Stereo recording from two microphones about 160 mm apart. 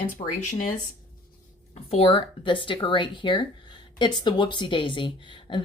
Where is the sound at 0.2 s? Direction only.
45° left (ahead or behind).